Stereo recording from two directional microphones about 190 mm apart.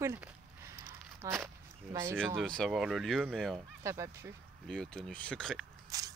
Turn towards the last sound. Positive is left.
turn(degrees=-20)  # may be behind; listen again after turning